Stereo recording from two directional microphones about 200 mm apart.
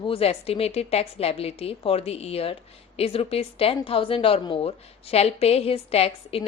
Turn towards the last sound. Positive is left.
turn(degrees=30)  # may be behind; listen again after turning